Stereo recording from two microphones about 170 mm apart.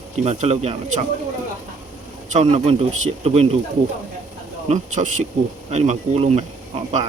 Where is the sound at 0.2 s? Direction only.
40° right (ahead or behind).